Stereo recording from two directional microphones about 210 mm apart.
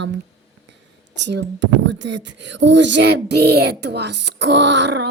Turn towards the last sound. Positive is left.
turn(degrees=-60)  # may be behind; listen again after turning